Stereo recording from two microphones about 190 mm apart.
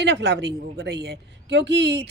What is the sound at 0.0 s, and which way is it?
A man's voice, 60° right (ahead or behind).